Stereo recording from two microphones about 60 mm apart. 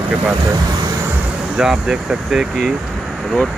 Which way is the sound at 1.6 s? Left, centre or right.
Centre.